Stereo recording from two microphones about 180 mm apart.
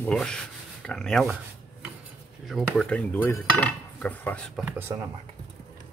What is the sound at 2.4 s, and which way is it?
Cutlery, centre (ahead or behind).